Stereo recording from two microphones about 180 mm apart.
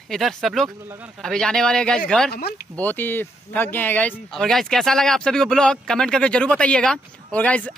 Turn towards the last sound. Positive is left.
turn(degrees=5)  # may be behind; listen again after turning